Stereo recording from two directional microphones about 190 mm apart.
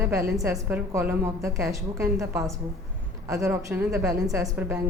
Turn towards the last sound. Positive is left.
turn(degrees=-15)  # may be behind; listen again after turning